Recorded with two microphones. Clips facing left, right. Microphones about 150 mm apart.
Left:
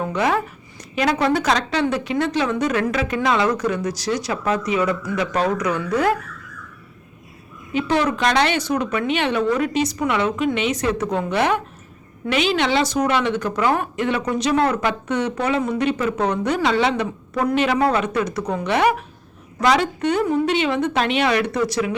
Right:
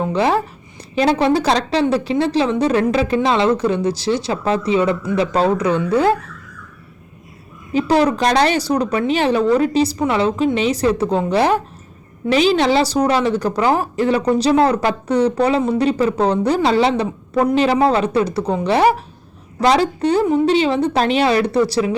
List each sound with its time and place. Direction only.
0.0 s a woman's voice: 30° right (ahead or behind)
7.7 s a woman's voice: 35° right (ahead or behind)